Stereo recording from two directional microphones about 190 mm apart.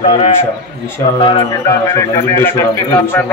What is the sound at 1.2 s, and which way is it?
A man's voice, 25° left (ahead or behind).